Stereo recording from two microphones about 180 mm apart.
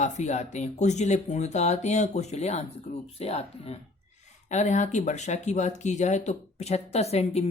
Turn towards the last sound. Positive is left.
turn(degrees=35)  # may be behind; listen again after turning